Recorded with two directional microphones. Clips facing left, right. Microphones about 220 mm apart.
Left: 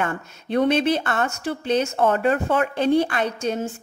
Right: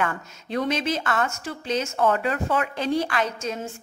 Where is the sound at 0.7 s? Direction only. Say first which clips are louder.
Left 6 dB; 60° left (ahead or behind).